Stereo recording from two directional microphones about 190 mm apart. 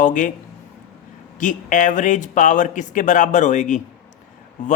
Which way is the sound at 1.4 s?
40° left (ahead or behind).